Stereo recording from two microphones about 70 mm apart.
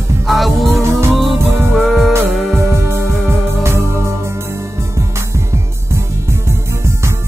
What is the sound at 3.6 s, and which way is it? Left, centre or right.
Music, right.